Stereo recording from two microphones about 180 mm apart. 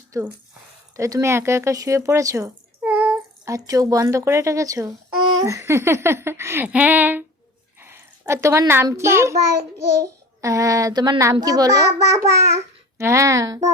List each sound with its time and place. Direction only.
0.1 s a child's voice: 20° right (ahead or behind)
3.5 s a child's voice: 20° right (ahead or behind)